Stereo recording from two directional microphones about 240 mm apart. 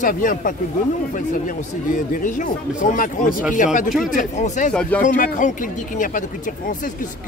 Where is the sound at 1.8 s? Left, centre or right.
Left.